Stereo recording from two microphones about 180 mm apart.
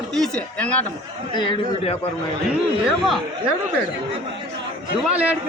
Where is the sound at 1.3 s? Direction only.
30° left (ahead or behind).